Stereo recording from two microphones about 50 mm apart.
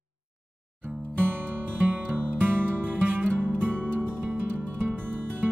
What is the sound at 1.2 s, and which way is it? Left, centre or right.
Music, right.